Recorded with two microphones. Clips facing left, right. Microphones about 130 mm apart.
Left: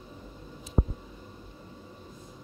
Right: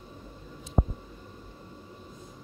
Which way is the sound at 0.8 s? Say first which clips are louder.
Right 1 dB; 60° right (ahead or behind).